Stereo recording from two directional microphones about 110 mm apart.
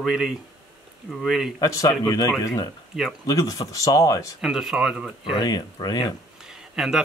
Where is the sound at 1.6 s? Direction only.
35° left (ahead or behind).